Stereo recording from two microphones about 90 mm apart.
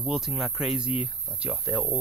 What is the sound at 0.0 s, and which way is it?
Speech, 5° right (ahead or behind).